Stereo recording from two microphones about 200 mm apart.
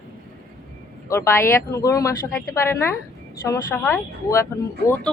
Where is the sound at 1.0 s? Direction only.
15° left (ahead or behind).